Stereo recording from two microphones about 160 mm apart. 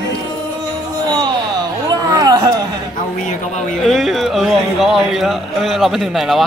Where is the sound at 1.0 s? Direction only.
25° right (ahead or behind).